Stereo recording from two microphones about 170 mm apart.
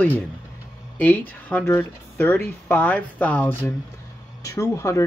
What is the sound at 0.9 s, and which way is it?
Speech, 10° left (ahead or behind).